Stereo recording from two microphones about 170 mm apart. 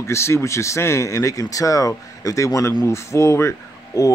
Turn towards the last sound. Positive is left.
turn(degrees=15)  # may be behind; listen again after turning